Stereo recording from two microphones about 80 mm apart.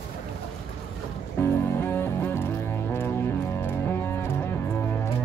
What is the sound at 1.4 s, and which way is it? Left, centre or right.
Music, left.